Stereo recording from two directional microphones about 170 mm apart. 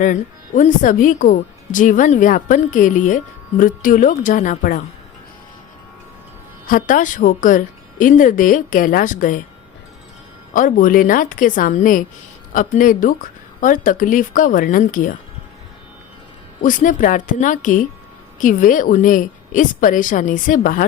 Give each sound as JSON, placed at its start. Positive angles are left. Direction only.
{"t": 0.0, "sound": "speech", "side_deg": 45}
{"t": 6.7, "sound": "speech", "side_deg": 50}
{"t": 10.5, "sound": "speech", "side_deg": 50}
{"t": 16.6, "sound": "speech", "side_deg": 50}